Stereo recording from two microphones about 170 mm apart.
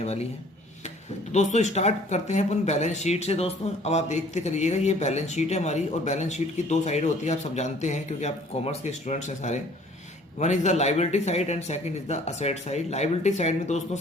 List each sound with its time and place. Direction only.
0.0 s speech: 40° left (ahead or behind)
1.3 s speech: 45° left (ahead or behind)